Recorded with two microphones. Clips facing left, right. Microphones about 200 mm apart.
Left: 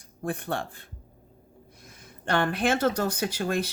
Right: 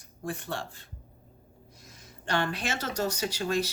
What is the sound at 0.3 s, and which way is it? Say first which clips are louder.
Speech: left 4 dB; 55° left (ahead or behind).